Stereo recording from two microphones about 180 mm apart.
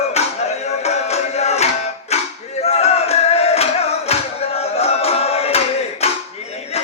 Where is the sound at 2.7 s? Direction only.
35° left (ahead or behind).